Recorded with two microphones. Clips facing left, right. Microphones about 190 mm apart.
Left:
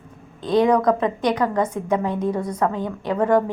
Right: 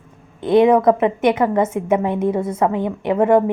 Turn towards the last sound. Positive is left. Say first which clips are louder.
# right 4 dB
turn(degrees=-20)  # may be behind; listen again after turning